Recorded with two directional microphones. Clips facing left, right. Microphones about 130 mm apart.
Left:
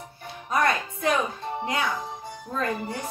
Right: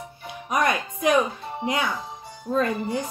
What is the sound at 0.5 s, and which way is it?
Music, 15° right (ahead or behind).